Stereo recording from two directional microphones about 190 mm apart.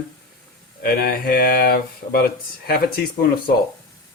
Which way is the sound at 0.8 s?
50° left (ahead or behind).